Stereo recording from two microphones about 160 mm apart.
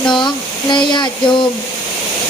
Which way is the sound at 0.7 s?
30° left (ahead or behind).